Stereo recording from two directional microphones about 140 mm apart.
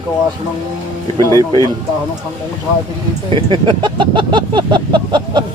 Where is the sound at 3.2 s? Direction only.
35° right (ahead or behind).